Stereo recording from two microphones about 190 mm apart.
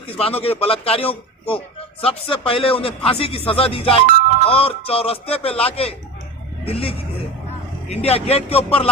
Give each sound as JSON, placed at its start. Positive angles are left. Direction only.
{"t": 0.2, "sound": "a man's voice", "side_deg": 30}